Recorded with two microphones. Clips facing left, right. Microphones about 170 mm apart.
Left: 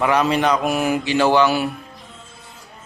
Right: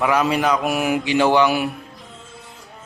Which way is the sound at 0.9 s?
15° right (ahead or behind).